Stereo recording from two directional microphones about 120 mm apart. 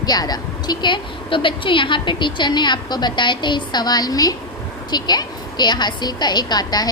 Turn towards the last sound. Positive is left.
turn(degrees=35)  # may be behind; listen again after turning